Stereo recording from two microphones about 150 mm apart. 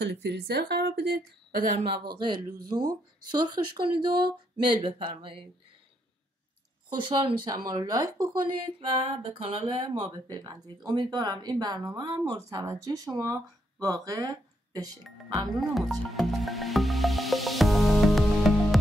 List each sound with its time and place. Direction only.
0.0 s speech: 90° right
2.0 s music: 30° right (ahead or behind)
2.7 s speech: 30° right (ahead or behind)
4.2 s music: 30° right (ahead or behind)
6.9 s speech: 30° right (ahead or behind)
8.9 s music: 35° right (ahead or behind)
10.3 s speech: 25° right (ahead or behind)
15.7 s music: centre (ahead or behind)